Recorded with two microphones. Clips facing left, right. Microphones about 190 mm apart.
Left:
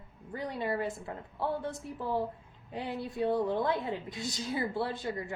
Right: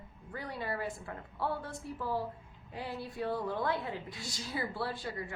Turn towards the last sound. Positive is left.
turn(degrees=20)  # may be behind; listen again after turning